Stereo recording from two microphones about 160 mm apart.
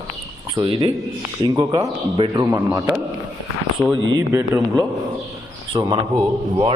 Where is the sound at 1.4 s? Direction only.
25° right (ahead or behind).